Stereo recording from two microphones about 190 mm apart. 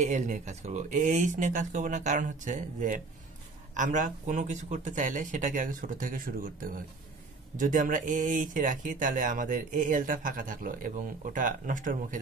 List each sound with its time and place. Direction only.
0.0 s speech: 40° right (ahead or behind)